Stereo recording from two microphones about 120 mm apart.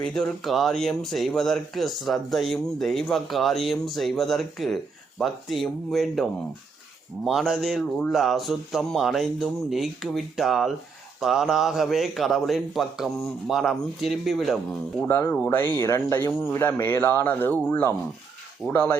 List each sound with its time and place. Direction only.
0.0 s speech: 5° left (ahead or behind)
7.3 s speech: centre (ahead or behind)
15.0 s speech: 20° left (ahead or behind)